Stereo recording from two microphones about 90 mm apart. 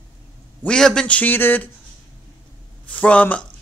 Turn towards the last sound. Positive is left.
turn(degrees=15)  # may be behind; listen again after turning